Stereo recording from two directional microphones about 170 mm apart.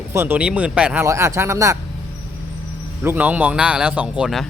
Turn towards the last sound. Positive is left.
turn(degrees=0)  # may be behind; listen again after turning